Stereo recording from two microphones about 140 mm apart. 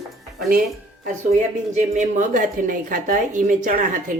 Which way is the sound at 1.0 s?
60° right (ahead or behind).